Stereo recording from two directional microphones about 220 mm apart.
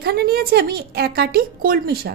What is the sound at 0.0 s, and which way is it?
A woman's voice, 45° right (ahead or behind).